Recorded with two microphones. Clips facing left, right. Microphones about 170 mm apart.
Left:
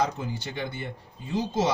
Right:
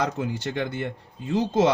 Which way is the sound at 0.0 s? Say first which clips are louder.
Right 2 dB; 65° right (ahead or behind).